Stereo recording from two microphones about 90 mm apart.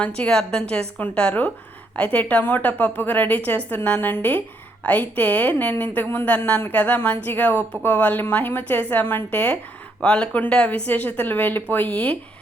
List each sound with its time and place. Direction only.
0.0 s a woman's voice: 15° left (ahead or behind)